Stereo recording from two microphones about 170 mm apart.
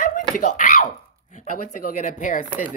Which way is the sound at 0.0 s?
50° left (ahead or behind).